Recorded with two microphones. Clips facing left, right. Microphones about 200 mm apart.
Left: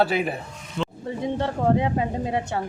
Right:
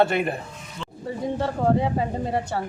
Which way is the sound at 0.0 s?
Centre (ahead or behind).